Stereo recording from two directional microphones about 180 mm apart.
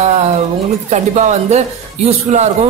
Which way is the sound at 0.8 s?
40° right (ahead or behind).